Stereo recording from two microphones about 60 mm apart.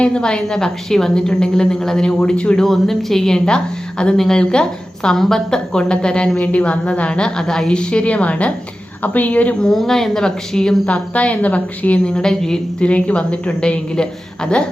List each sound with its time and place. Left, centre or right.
0.0 s a woman's voice: centre
9.6 s a woman's voice: centre
10.8 s a woman's voice: left
12.8 s a woman's voice: left